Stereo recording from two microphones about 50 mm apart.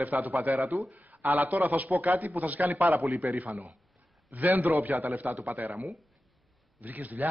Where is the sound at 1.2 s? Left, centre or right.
Right.